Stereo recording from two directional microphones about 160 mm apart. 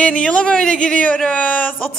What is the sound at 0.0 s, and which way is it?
Speech, 5° left (ahead or behind).